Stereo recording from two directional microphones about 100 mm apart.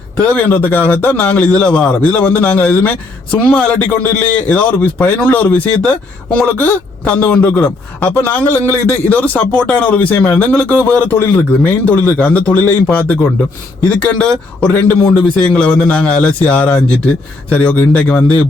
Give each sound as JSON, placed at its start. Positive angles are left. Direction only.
{"t": 0.2, "sound": "a man's voice", "side_deg": 15}